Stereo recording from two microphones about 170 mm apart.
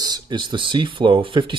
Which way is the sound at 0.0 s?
25° right (ahead or behind).